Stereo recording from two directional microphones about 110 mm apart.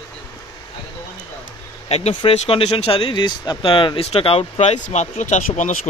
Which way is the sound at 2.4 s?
60° left (ahead or behind).